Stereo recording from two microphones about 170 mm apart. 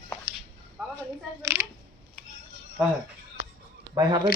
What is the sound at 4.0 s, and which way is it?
Speech, 25° right (ahead or behind).